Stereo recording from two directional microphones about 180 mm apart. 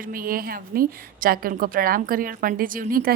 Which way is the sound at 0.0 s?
50° right (ahead or behind).